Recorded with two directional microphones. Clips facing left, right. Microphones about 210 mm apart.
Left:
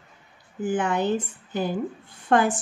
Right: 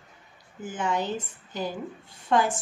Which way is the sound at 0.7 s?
60° left (ahead or behind).